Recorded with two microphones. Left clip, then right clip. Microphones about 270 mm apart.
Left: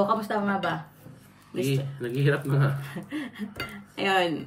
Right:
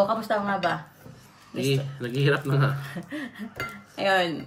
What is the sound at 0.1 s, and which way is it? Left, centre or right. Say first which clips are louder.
Speech: right 1 dB; centre.